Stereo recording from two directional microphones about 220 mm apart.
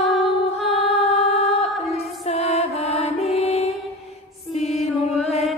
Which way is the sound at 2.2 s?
30° left (ahead or behind).